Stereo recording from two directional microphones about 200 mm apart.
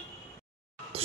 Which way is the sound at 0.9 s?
30° right (ahead or behind).